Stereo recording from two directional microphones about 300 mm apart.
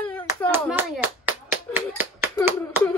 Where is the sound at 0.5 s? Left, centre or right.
Centre.